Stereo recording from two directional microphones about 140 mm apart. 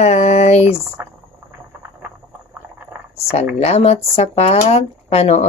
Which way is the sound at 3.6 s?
50° left (ahead or behind).